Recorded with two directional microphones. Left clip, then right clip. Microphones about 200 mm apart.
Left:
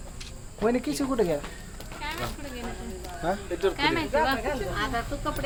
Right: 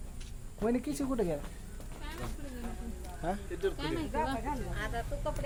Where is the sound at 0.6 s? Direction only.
20° right (ahead or behind).